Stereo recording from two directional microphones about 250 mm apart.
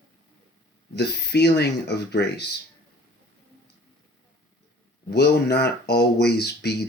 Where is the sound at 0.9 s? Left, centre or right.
Left.